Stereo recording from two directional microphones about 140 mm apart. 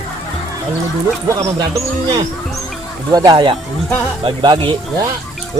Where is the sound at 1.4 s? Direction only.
25° right (ahead or behind).